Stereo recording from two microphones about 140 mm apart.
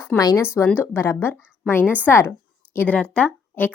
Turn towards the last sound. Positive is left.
turn(degrees=10)  # may be behind; listen again after turning